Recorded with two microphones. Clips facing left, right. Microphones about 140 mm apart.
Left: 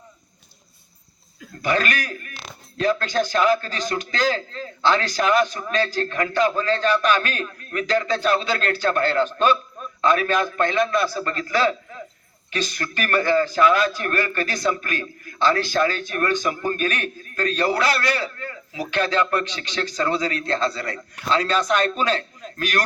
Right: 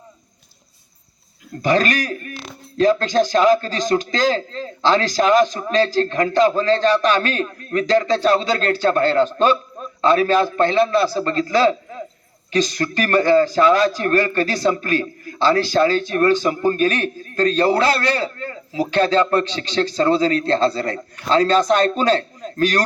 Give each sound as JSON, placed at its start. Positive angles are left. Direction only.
{"t": 1.6, "sound": "a man's voice", "side_deg": -35}